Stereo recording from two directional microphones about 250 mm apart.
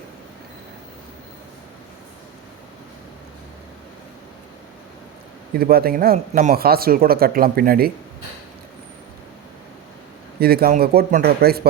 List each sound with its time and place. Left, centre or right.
5.5 s speech: right
10.4 s speech: right